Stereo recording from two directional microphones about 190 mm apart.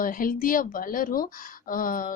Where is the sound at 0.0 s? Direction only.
45° left (ahead or behind).